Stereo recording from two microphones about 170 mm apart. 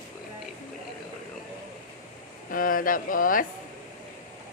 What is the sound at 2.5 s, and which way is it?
Speech, 55° left (ahead or behind).